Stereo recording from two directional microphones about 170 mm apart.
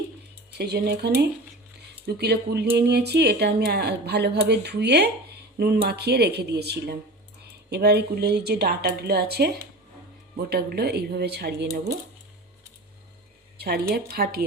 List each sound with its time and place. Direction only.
0.5 s a woman's voice: 75° right (ahead or behind)
5.5 s a woman's voice: 65° right (ahead or behind)
10.5 s a woman's voice: 65° right (ahead or behind)
13.6 s a woman's voice: 65° right (ahead or behind)